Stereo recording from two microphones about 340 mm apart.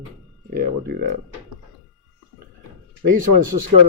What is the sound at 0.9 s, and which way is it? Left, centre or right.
Speech, right.